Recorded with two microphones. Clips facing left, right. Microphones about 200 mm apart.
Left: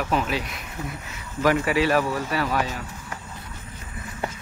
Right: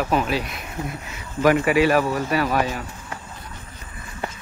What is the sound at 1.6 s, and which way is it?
Speech, 15° right (ahead or behind).